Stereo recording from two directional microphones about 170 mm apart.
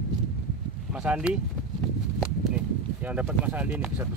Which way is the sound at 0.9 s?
5° right (ahead or behind).